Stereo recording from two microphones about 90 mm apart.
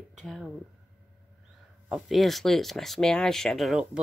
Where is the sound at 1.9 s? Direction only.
Centre (ahead or behind).